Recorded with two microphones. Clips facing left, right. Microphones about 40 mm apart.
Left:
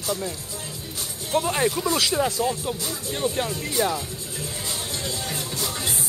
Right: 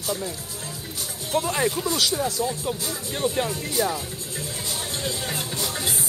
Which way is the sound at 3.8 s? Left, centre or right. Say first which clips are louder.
Left 1 dB; left.